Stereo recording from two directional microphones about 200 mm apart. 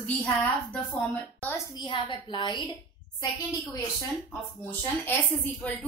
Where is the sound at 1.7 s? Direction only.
25° left (ahead or behind).